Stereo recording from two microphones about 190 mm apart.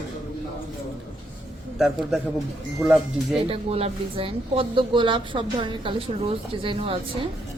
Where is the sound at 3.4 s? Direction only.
30° right (ahead or behind).